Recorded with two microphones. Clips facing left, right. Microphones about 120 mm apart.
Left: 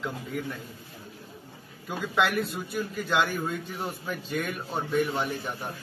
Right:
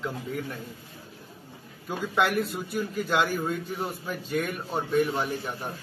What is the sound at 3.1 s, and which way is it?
A man's voice, 5° right (ahead or behind).